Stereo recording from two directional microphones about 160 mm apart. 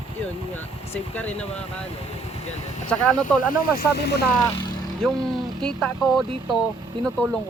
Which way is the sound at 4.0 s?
90° left.